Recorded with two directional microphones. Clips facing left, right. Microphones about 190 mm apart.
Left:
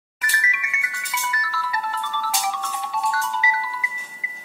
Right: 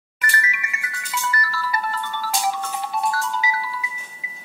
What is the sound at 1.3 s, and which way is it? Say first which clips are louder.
Music: right 1 dB; 40° right (ahead or behind).